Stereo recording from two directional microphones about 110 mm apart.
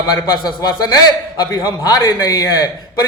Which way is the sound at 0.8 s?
35° left (ahead or behind).